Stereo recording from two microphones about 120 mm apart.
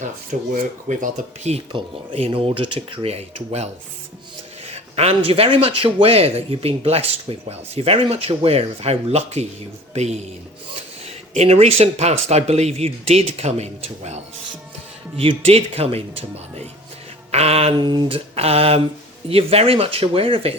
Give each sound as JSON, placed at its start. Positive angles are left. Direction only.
{"t": 0.3, "sound": "speech", "side_deg": -90}
{"t": 1.7, "sound": "a man's voice", "side_deg": -50}
{"t": 15.1, "sound": "a man's voice", "side_deg": -55}
{"t": 17.7, "sound": "speech", "side_deg": -40}
{"t": 18.3, "sound": "a man's voice", "side_deg": -55}